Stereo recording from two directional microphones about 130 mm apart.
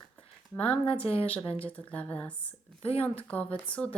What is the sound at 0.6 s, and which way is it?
Speech, 45° left (ahead or behind).